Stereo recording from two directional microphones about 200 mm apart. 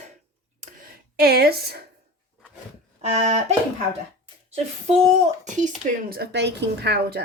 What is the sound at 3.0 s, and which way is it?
Speech, 35° right (ahead or behind).